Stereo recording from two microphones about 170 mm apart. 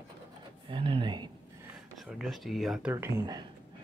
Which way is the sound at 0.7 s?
30° right (ahead or behind).